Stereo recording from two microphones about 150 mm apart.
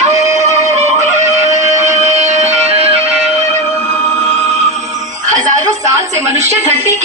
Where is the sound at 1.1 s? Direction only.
20° right (ahead or behind).